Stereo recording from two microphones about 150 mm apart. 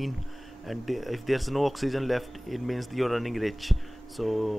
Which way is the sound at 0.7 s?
Centre (ahead or behind).